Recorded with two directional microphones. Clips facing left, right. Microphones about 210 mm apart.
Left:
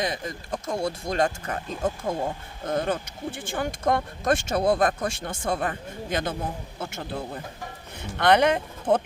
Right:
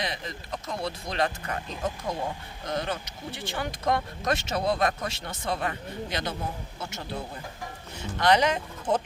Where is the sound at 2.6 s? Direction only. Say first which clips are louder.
Left 5 dB; 50° left (ahead or behind).